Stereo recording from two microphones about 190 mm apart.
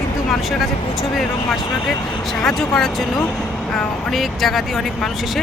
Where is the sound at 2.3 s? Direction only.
Centre (ahead or behind).